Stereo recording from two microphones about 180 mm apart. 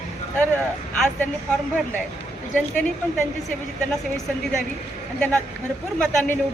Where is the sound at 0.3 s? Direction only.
5° left (ahead or behind).